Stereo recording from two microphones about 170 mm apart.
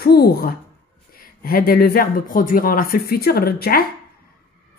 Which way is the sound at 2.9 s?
65° left (ahead or behind).